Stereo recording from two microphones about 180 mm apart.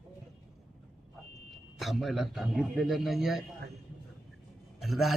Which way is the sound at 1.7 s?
Centre (ahead or behind).